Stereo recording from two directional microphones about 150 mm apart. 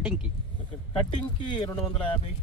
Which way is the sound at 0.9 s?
40° left (ahead or behind).